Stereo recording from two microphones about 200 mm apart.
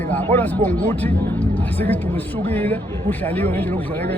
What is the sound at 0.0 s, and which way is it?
Speech, 10° left (ahead or behind).